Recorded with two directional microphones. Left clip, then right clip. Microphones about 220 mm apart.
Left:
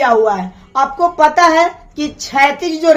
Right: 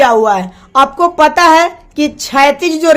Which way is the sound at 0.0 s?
40° right (ahead or behind).